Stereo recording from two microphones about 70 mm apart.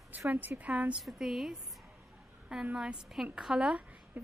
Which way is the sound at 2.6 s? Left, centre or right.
Centre.